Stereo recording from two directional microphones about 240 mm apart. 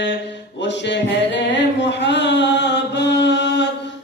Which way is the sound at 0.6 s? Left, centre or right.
Left.